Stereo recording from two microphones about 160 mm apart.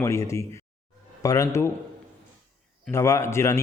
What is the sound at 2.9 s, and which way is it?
Speech, 20° left (ahead or behind).